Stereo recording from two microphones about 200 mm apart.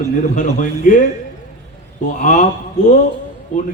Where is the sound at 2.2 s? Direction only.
40° left (ahead or behind).